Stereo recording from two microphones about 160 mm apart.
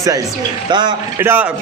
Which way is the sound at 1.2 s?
15° right (ahead or behind).